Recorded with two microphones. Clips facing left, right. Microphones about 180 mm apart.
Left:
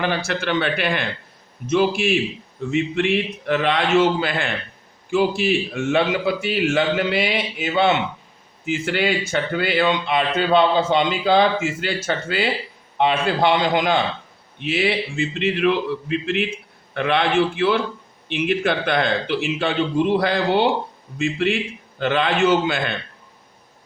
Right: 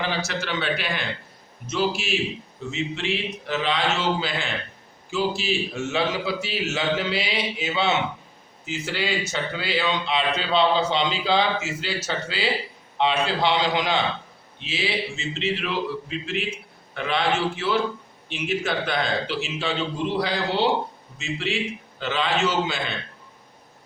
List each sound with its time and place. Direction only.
0.0 s a man's voice: 55° left (ahead or behind)